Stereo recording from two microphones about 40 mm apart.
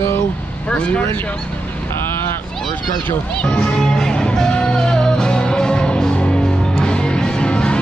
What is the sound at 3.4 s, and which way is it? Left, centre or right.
Speech, left.